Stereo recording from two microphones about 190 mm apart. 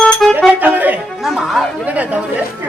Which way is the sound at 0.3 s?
10° right (ahead or behind).